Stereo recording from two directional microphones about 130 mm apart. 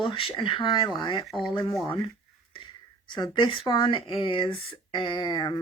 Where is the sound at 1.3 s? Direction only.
Centre (ahead or behind).